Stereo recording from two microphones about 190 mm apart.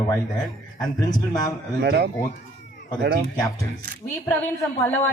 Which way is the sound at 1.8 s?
60° right (ahead or behind).